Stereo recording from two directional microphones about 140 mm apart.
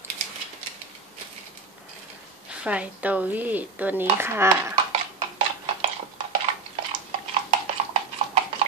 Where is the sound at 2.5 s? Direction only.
10° right (ahead or behind).